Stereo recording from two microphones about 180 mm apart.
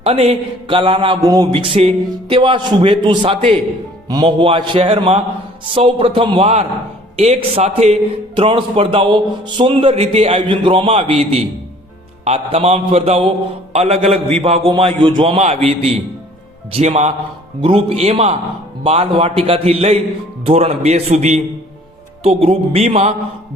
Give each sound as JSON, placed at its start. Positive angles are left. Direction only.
{"t": 0.0, "sound": "a man's voice", "side_deg": -35}